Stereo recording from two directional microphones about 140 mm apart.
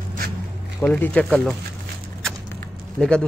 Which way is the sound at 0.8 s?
10° left (ahead or behind).